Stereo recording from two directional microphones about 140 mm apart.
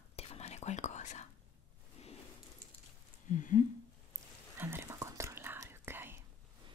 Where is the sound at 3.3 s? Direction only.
65° left (ahead or behind).